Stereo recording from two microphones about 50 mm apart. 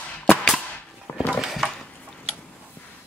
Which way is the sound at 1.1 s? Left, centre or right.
Left.